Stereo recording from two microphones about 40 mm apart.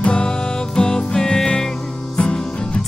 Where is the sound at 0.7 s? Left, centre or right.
Centre.